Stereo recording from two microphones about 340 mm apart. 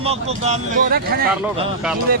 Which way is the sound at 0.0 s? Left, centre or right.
Centre.